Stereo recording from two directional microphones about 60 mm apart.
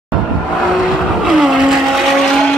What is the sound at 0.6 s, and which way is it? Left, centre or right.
Vehicle, centre.